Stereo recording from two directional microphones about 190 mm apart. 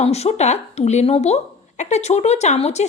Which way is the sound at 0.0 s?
35° left (ahead or behind).